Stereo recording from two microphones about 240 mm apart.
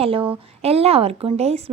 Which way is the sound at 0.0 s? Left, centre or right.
Right.